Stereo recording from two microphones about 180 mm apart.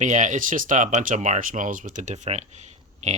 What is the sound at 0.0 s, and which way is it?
Speech, 45° right (ahead or behind).